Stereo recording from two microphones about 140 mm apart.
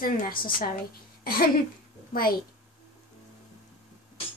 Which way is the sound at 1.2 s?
90° left.